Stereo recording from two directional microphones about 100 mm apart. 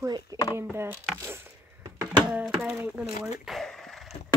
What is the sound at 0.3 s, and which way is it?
Speech, 35° right (ahead or behind).